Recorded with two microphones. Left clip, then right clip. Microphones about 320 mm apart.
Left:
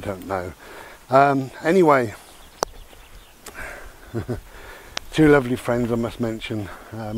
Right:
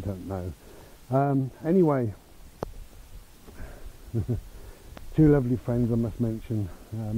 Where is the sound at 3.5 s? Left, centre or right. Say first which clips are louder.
Left 14 dB; centre.